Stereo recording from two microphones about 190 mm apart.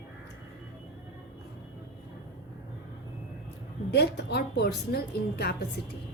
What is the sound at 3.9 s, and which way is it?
A woman's voice, 60° left (ahead or behind).